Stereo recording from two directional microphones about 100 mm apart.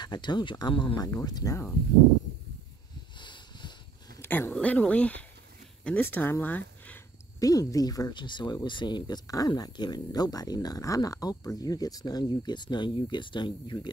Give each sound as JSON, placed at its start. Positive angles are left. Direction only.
{"t": 0.0, "sound": "speech", "side_deg": 50}
{"t": 3.2, "sound": "a sound", "side_deg": 50}
{"t": 4.2, "sound": "speech", "side_deg": 20}
{"t": 7.3, "sound": "speech", "side_deg": 35}